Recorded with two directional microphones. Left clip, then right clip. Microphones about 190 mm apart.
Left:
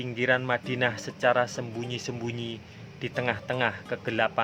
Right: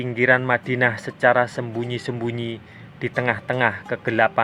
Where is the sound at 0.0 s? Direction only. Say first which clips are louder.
Right 8 dB; 25° right (ahead or behind).